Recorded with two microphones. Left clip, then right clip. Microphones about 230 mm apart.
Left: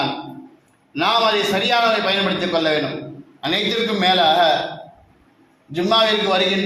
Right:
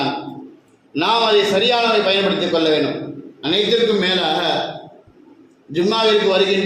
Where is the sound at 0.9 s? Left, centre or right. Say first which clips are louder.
Right 2 dB; centre.